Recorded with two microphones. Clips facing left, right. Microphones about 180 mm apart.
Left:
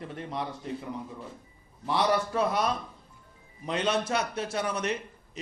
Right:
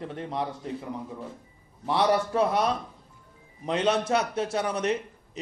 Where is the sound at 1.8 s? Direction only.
30° right (ahead or behind).